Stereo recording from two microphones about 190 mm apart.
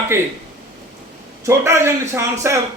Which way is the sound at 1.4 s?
15° right (ahead or behind).